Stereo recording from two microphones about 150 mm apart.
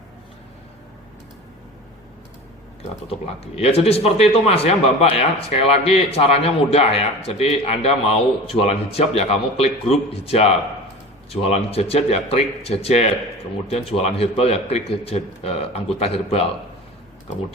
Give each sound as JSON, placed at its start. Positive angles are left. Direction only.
{"t": 3.5, "sound": "speech", "side_deg": 40}